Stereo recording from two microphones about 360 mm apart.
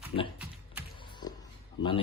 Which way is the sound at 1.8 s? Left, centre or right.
Centre.